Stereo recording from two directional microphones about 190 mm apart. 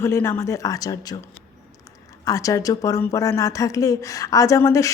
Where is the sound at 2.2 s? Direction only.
15° left (ahead or behind).